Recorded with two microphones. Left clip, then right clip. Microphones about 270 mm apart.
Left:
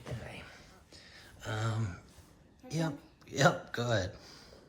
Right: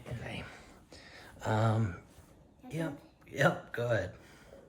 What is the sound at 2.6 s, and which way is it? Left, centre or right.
Speech, centre.